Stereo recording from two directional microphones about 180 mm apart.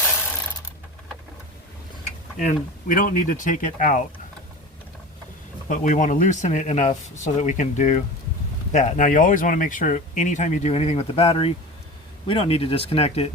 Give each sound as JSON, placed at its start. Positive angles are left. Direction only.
{"t": 2.4, "sound": "speech", "side_deg": 50}
{"t": 5.6, "sound": "speech", "side_deg": 45}